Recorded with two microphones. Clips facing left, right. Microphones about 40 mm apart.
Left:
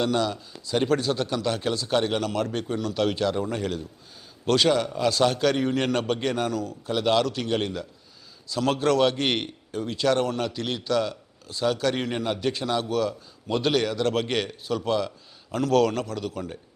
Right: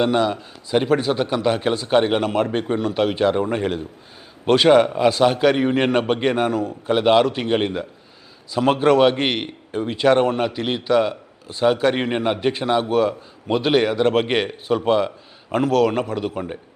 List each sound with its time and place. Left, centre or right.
0.0 s a man's voice: right
4.7 s a man's voice: right